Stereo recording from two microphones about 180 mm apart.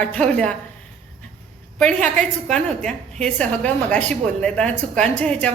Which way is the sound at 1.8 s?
5° left (ahead or behind).